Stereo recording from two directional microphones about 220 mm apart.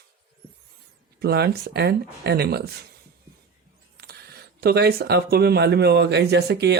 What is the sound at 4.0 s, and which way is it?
Speech, 45° right (ahead or behind).